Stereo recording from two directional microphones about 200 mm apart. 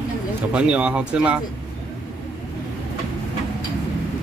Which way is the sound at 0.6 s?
5° right (ahead or behind).